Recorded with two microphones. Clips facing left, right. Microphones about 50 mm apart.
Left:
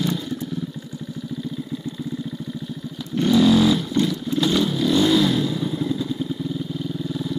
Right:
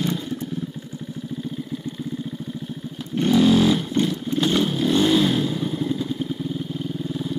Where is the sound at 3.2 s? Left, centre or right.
Right.